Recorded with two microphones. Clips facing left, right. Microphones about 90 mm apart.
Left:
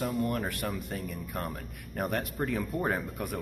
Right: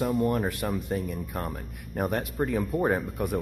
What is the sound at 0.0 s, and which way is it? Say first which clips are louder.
Speech: right 5 dB; 20° right (ahead or behind).